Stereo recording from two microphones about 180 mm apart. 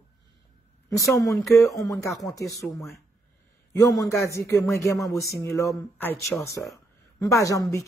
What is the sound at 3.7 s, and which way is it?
A man's voice, 15° left (ahead or behind).